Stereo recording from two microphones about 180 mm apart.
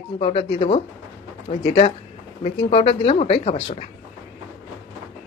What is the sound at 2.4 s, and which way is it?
Speech, 35° left (ahead or behind).